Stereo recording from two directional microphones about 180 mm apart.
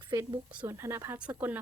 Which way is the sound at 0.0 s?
25° right (ahead or behind).